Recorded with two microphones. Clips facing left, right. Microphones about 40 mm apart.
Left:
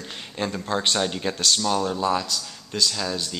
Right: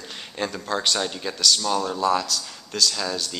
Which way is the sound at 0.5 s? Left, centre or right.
Centre.